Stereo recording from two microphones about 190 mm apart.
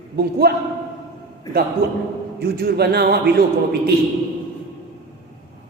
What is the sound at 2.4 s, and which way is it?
Speech, 55° right (ahead or behind).